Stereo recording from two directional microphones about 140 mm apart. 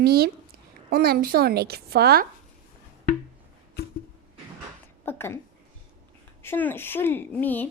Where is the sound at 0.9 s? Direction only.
90° right.